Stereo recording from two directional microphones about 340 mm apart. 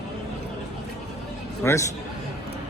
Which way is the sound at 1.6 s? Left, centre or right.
Centre.